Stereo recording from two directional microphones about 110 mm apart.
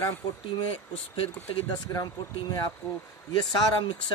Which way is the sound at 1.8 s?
35° left (ahead or behind).